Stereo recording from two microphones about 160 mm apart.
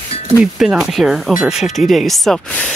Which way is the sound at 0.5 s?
5° right (ahead or behind).